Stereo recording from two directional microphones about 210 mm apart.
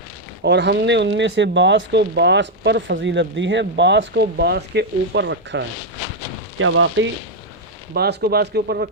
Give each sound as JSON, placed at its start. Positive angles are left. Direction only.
{"t": 0.4, "sound": "speech", "side_deg": -55}
{"t": 7.9, "sound": "speech", "side_deg": -50}